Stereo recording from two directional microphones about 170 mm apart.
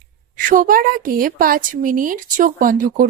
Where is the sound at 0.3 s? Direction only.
50° right (ahead or behind).